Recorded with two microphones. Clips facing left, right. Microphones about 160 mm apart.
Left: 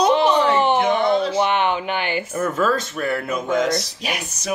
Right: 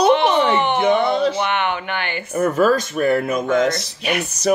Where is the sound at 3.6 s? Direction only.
60° right (ahead or behind).